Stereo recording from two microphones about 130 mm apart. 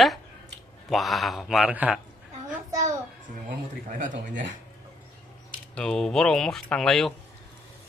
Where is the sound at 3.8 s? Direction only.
80° right.